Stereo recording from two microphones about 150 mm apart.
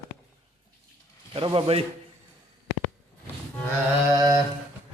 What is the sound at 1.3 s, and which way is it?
Speech, 35° right (ahead or behind).